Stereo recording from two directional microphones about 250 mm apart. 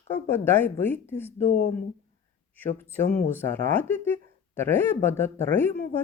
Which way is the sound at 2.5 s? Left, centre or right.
Centre.